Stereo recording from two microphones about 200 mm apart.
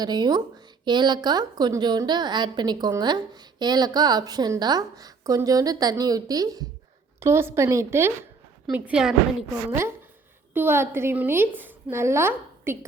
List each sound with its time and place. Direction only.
0.0 s a woman's voice: 20° right (ahead or behind); by 9.1 s 5° right (ahead or behind)
10.5 s a woman's voice: 10° right (ahead or behind)